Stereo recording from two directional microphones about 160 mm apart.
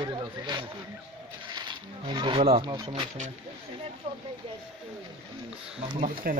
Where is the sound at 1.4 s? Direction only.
25° right (ahead or behind).